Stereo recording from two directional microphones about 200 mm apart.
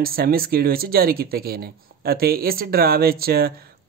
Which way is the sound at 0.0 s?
50° right (ahead or behind).